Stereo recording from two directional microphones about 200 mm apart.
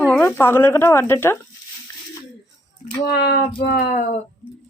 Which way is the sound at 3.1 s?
55° left (ahead or behind).